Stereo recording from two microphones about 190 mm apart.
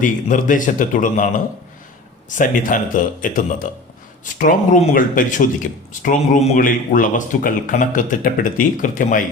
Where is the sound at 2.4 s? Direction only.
45° left (ahead or behind).